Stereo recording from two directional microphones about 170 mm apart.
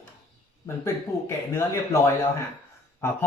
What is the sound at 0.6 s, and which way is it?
Speech, 15° left (ahead or behind).